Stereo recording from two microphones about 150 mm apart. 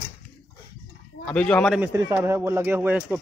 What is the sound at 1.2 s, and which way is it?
Speech, 5° left (ahead or behind).